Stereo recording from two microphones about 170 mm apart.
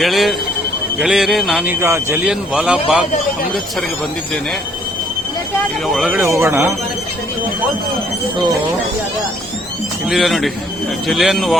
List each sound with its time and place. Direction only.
0.0 s speech: centre (ahead or behind)
1.6 s speech: 15° right (ahead or behind)
2.2 s speech: 5° right (ahead or behind)
5.9 s speech: centre (ahead or behind)
6.1 s speech: 15° right (ahead or behind)
10.1 s speech: centre (ahead or behind)